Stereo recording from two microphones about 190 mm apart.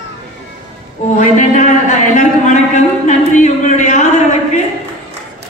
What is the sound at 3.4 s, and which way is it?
Speech, 40° left (ahead or behind).